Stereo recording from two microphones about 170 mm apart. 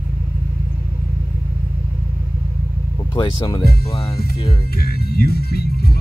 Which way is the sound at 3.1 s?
25° left (ahead or behind).